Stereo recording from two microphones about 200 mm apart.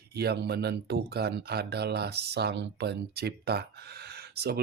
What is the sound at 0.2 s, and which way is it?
Speech, 55° right (ahead or behind).